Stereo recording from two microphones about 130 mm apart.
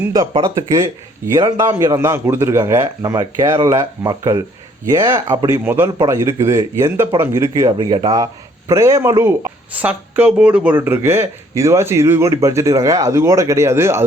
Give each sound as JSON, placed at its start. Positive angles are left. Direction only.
{"t": 0.3, "sound": "speech", "side_deg": -35}
{"t": 1.4, "sound": "speech", "side_deg": -20}
{"t": 5.6, "sound": "a man's voice", "side_deg": -15}
{"t": 7.8, "sound": "speech", "side_deg": -35}